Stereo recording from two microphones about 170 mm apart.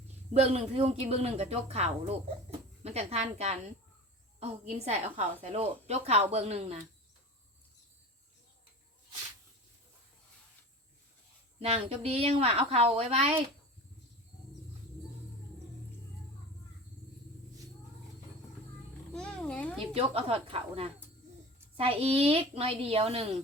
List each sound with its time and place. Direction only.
0.3 s a woman's voice: 35° right (ahead or behind)
11.6 s a woman's voice: 35° right (ahead or behind)
19.1 s a child's voice: 5° left (ahead or behind)
19.8 s a woman's voice: 35° right (ahead or behind)